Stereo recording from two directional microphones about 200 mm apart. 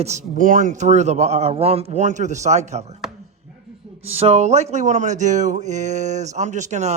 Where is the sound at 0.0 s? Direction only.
35° right (ahead or behind).